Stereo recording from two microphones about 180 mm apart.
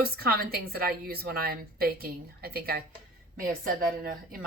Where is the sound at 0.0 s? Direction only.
55° right (ahead or behind).